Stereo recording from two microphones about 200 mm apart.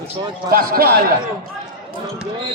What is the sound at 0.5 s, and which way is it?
Music, 45° right (ahead or behind).